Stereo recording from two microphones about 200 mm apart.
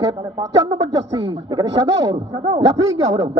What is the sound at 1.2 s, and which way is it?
A man's voice, 20° right (ahead or behind).